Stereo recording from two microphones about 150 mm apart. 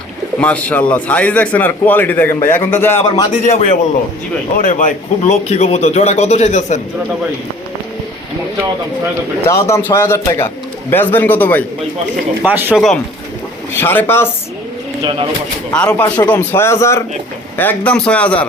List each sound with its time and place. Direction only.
0.3 s a man's voice: 10° left (ahead or behind)
3.4 s speech: 50° left (ahead or behind)
4.6 s speech: 60° left (ahead or behind)
9.5 s a man's voice: 20° left (ahead or behind)
12.4 s speech: 10° right (ahead or behind)
13.7 s a man's voice: 15° left (ahead or behind)
15.0 s speech: 35° right (ahead or behind)
15.7 s a man's voice: 5° left (ahead or behind)